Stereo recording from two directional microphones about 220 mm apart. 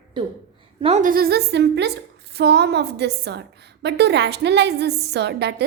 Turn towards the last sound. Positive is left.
turn(degrees=-50)  # may be behind; listen again after turning